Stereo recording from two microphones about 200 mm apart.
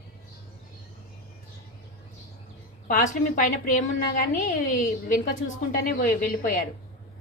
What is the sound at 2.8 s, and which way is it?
A woman's voice, 40° left (ahead or behind).